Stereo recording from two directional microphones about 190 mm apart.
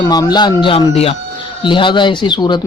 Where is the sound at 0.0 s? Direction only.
20° left (ahead or behind).